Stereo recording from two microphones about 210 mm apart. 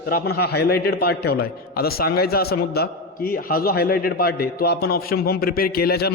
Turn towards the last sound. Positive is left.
turn(degrees=50)  # may be behind; listen again after turning